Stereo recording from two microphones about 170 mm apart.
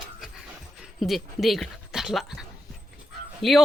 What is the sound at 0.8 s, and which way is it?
Speech, centre (ahead or behind).